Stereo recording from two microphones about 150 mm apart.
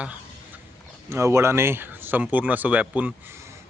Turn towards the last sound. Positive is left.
turn(degrees=-10)  # may be behind; listen again after turning